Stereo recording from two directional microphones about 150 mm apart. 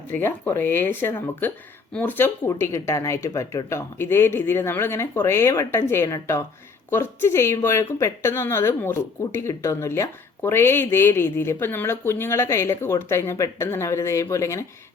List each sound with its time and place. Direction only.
0.1 s speech: 15° left (ahead or behind)